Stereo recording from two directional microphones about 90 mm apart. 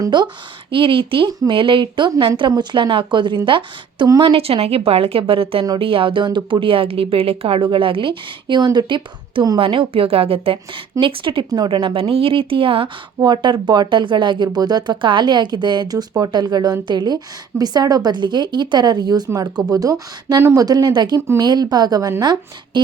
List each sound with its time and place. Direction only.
0.1 s a woman's voice: 55° right (ahead or behind)
0.7 s a woman's voice: 75° right (ahead or behind)
4.2 s a woman's voice: 80° right
5.8 s speech: 80° right; by 9.0 s 50° right (ahead or behind)
9.6 s a woman's voice: 85° right
11.0 s a woman's voice: 70° right (ahead or behind)
11.9 s speech: 90° right
13.1 s speech: 55° right (ahead or behind)